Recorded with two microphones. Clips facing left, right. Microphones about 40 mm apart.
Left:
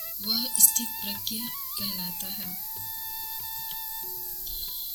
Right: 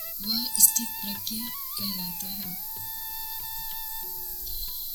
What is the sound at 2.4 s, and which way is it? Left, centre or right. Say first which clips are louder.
Music: even; centre.